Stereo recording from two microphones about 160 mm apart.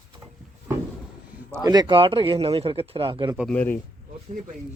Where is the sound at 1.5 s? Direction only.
20° right (ahead or behind).